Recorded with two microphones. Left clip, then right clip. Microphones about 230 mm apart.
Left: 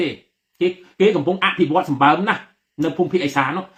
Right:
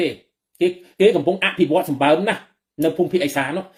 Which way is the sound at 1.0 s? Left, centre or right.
Centre.